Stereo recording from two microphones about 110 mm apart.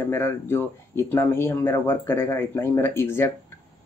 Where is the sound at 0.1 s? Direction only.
20° left (ahead or behind).